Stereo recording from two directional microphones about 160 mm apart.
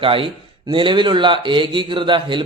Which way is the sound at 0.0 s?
35° right (ahead or behind).